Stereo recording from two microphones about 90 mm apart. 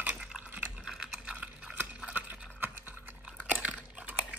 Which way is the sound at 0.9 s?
Centre (ahead or behind).